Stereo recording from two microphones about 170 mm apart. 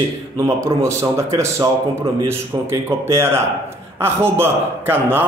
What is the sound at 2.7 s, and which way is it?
A man's voice, 15° right (ahead or behind).